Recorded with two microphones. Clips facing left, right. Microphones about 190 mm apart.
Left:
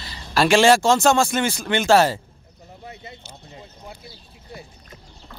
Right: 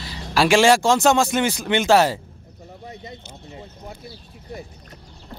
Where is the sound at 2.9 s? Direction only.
40° right (ahead or behind).